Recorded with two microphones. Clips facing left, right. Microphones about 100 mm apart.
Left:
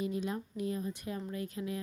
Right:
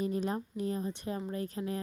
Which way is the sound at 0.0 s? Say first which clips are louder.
Right 3 dB; 40° right (ahead or behind).